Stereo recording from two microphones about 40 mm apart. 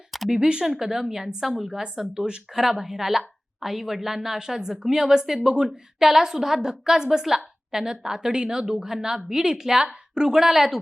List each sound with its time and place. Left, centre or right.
0.3 s speech: right
0.8 s a woman's voice: centre